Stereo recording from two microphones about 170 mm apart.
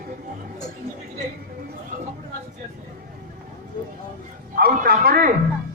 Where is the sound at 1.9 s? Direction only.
45° right (ahead or behind).